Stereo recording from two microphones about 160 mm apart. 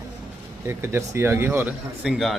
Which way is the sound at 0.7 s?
15° right (ahead or behind).